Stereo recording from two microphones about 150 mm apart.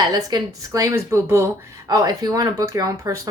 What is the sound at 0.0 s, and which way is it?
Speech, 30° right (ahead or behind).